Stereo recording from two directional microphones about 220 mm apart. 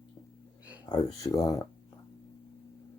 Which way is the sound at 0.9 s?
15° left (ahead or behind).